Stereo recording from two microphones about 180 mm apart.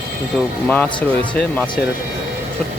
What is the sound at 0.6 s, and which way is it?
Speech, 5° left (ahead or behind).